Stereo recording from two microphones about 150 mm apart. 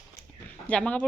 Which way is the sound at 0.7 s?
10° left (ahead or behind).